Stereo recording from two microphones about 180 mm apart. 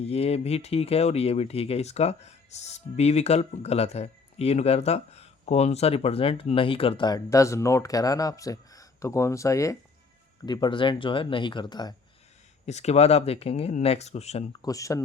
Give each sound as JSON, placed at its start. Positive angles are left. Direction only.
{"t": 0.0, "sound": "speech", "side_deg": 35}
{"t": 12.6, "sound": "speech", "side_deg": 35}
{"t": 14.6, "sound": "speech", "side_deg": 20}